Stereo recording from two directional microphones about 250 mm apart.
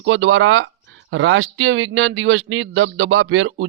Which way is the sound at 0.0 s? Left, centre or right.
Right.